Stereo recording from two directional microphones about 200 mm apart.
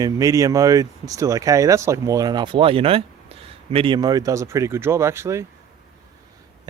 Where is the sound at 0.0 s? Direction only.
15° right (ahead or behind).